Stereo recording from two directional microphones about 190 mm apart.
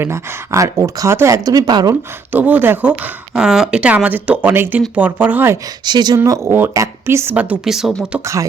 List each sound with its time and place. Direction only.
0.0 s speech: 15° right (ahead or behind)
2.3 s speech: 10° right (ahead or behind)
5.8 s speech: 20° right (ahead or behind); by 8.2 s centre (ahead or behind)
8.2 s speech: 15° right (ahead or behind)